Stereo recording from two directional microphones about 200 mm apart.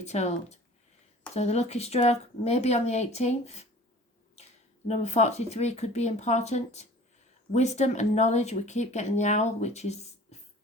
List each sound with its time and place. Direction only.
0.0 s speech: 35° left (ahead or behind)
4.9 s speech: 35° left (ahead or behind)